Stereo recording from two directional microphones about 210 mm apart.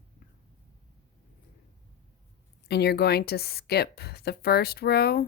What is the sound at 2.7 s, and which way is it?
Speech, 50° left (ahead or behind).